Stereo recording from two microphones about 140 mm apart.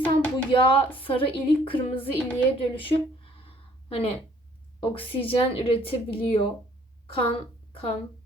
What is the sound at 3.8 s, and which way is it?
A woman's voice, 40° left (ahead or behind).